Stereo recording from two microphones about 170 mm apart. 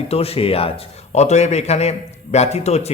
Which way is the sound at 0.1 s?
35° left (ahead or behind).